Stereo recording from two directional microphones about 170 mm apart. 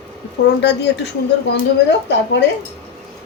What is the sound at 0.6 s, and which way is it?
Speech, 80° left.